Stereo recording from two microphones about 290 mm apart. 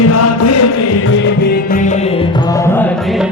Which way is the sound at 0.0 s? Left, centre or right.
Left.